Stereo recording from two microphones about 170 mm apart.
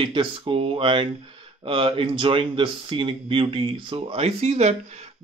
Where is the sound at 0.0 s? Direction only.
30° right (ahead or behind).